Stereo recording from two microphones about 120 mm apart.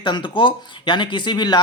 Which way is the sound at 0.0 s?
40° left (ahead or behind).